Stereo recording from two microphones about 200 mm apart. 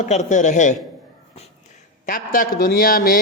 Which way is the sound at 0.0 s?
35° left (ahead or behind).